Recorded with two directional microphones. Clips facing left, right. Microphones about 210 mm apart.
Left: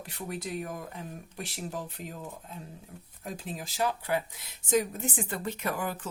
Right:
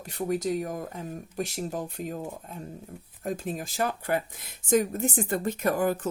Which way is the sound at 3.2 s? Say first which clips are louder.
Right 7 dB; 50° right (ahead or behind).